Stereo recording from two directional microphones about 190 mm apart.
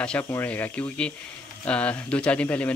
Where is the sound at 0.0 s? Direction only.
10° left (ahead or behind).